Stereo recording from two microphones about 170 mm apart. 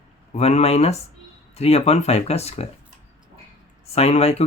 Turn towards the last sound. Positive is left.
turn(degrees=40)  # may be behind; listen again after turning